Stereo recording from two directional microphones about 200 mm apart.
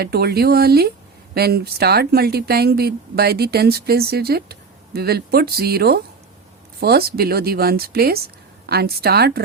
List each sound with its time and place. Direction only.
0.0 s speech: 50° right (ahead or behind)